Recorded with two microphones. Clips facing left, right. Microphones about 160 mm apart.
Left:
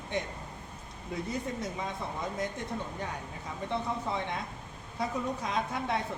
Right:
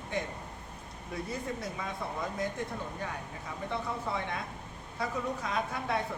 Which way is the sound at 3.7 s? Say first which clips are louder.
Left 2 dB; 20° left (ahead or behind).